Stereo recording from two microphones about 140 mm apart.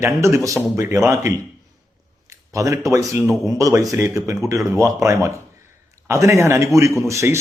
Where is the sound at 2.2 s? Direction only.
20° right (ahead or behind).